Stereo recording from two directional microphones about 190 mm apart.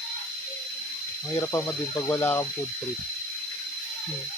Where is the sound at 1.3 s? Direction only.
15° left (ahead or behind).